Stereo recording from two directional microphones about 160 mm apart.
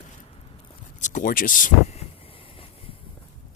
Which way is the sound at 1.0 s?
50° left (ahead or behind).